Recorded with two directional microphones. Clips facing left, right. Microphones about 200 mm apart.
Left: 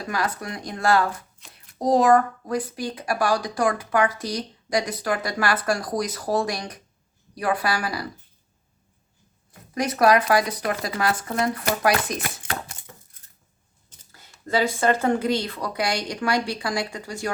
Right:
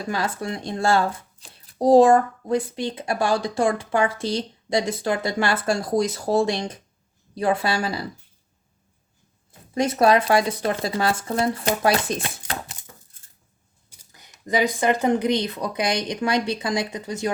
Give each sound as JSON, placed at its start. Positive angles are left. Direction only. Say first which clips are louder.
{"t": 0.0, "sound": "speech", "louder": "right 1 dB", "side_deg": -25}
{"t": 9.5, "sound": "speech", "louder": "right 3 dB", "side_deg": -25}
{"t": 13.9, "sound": "speech", "louder": "even", "side_deg": -15}